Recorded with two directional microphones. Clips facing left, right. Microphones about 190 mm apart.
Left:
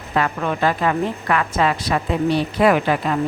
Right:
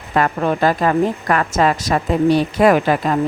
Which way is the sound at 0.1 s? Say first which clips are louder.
Right 4 dB; 45° right (ahead or behind).